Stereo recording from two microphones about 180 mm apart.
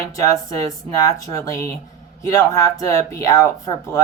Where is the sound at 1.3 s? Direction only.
15° left (ahead or behind).